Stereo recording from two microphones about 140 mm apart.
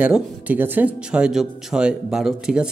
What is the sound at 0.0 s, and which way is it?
Speech, 10° right (ahead or behind).